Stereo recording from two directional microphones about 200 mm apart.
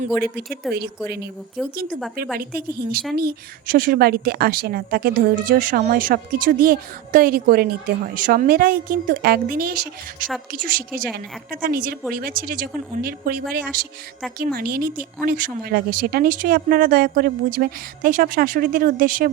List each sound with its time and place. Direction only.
0.2 s a woman's voice: 55° right (ahead or behind)